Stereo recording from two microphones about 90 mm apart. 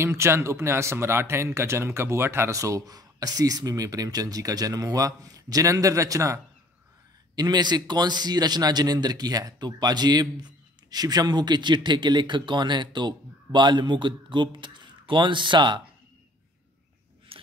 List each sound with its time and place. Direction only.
0.0 s speech: 30° right (ahead or behind)
7.3 s a man's voice: 50° right (ahead or behind)
17.3 s a sound: 90° right